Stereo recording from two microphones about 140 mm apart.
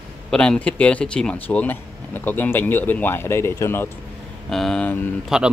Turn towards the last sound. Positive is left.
turn(degrees=-5)  # may be behind; listen again after turning